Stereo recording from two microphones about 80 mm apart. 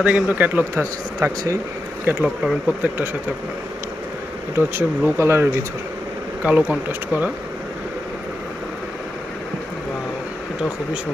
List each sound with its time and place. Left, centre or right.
0.0 s speech: centre
2.2 s speech: centre
4.6 s speech: right
6.4 s speech: centre